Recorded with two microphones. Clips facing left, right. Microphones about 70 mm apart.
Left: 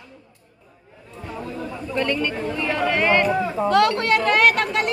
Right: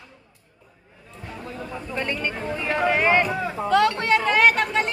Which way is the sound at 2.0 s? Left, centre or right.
Centre.